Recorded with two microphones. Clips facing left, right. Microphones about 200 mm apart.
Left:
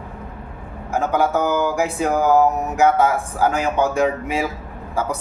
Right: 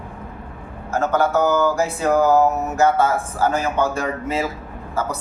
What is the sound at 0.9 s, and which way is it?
A man's voice, 15° left (ahead or behind).